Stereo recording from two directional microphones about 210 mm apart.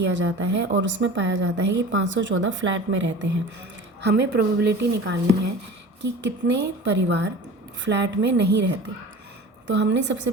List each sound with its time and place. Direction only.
0.1 s a woman's voice: 60° right (ahead or behind)
4.0 s a woman's voice: 50° right (ahead or behind)